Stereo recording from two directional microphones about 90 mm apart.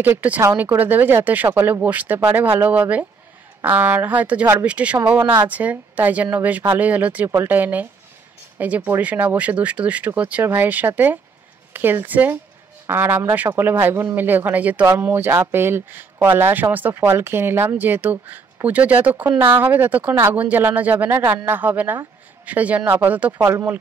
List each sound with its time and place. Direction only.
0.0 s a woman's voice: 20° right (ahead or behind)
5.2 s a woman's voice: 55° right (ahead or behind)
5.5 s a woman's voice: 20° right (ahead or behind)